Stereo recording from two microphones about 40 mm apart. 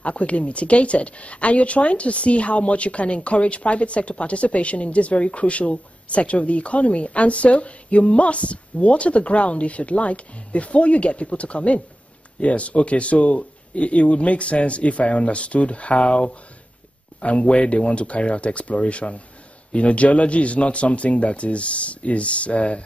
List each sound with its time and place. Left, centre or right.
0.0 s speech: left